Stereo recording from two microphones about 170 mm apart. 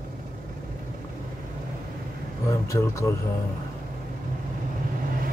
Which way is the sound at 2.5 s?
15° left (ahead or behind).